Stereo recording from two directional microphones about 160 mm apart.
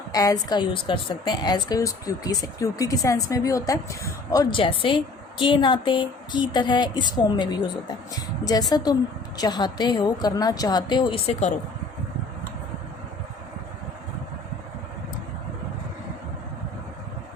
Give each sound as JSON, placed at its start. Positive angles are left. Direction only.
{"t": 0.1, "sound": "a woman's voice", "side_deg": 20}